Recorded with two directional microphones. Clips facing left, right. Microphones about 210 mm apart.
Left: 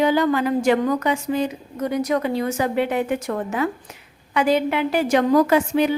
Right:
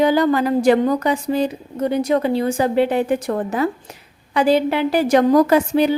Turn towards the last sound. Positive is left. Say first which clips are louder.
# right 3 dB
turn(degrees=-35)  # may be behind; listen again after turning